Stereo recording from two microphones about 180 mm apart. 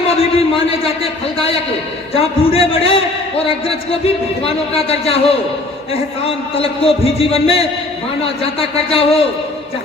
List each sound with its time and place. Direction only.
0.2 s a man's voice: 30° left (ahead or behind)
2.1 s a man's voice: 30° left (ahead or behind)